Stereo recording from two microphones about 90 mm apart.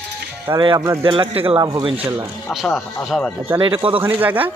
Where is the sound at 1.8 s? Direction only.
90° right.